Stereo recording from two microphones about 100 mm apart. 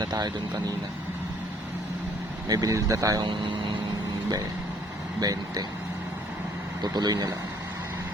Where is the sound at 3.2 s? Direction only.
55° right (ahead or behind).